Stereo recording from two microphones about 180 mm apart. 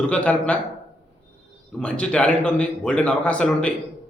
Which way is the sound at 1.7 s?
5° left (ahead or behind).